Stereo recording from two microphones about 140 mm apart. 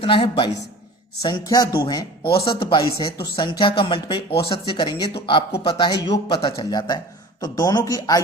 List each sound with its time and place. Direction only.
0.0 s speech: 40° left (ahead or behind)
1.2 s a man's voice: 25° left (ahead or behind)